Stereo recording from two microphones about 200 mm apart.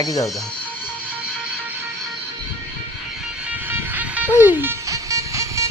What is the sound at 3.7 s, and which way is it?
Music, 10° right (ahead or behind).